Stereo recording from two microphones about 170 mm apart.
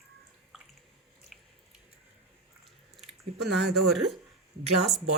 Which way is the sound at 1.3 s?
Centre (ahead or behind).